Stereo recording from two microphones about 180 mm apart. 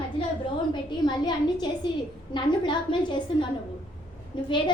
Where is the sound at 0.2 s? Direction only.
30° left (ahead or behind).